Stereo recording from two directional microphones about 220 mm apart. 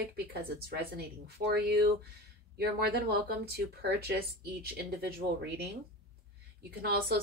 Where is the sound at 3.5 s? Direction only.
45° right (ahead or behind).